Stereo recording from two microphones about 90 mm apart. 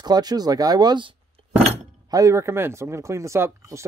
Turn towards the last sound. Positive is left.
turn(degrees=-30)  # may be behind; listen again after turning